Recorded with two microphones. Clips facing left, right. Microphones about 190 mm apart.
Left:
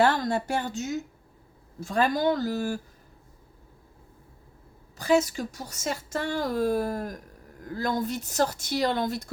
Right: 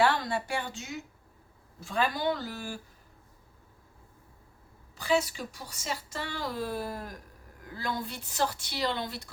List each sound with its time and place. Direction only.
0.0 s a woman's voice: 45° left (ahead or behind)
4.9 s a woman's voice: 45° left (ahead or behind)